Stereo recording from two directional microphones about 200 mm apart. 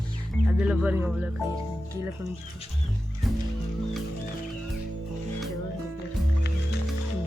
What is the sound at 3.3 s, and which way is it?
Music, centre (ahead or behind).